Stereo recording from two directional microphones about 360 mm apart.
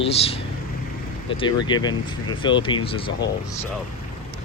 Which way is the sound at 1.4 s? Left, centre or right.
Centre.